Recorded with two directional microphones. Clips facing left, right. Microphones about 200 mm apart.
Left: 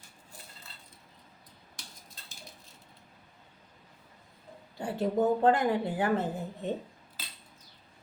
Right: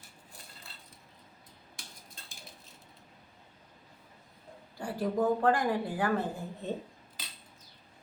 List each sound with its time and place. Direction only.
4.8 s speech: 25° left (ahead or behind)